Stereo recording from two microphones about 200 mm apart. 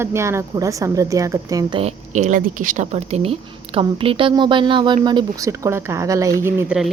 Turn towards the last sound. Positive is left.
turn(degrees=-10)  # may be behind; listen again after turning